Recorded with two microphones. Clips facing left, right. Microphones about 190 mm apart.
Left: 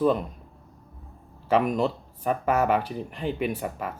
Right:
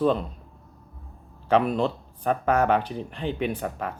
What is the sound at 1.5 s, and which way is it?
Speech, 10° left (ahead or behind).